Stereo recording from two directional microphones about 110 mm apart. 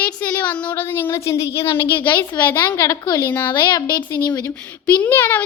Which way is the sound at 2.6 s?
30° left (ahead or behind).